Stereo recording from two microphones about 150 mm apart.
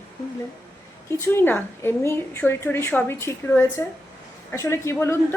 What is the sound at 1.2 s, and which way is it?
Speech, 15° left (ahead or behind).